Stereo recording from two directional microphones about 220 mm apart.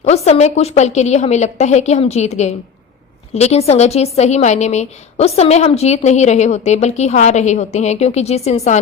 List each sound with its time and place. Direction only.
0.0 s a woman's voice: 30° left (ahead or behind)